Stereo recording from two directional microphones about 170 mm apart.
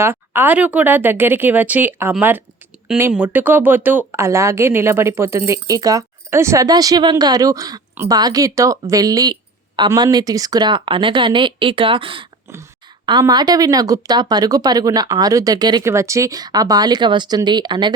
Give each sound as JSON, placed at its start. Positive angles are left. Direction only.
{"t": 0.0, "sound": "speech", "side_deg": -10}